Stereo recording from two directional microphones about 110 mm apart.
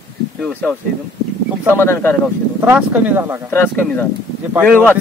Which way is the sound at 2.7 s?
15° right (ahead or behind).